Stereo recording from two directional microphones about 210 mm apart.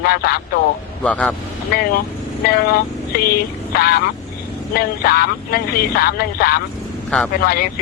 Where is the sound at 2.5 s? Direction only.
50° left (ahead or behind).